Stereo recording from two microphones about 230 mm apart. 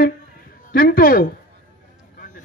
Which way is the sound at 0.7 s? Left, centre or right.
Left.